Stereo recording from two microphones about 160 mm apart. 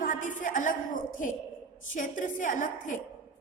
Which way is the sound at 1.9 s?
55° left (ahead or behind).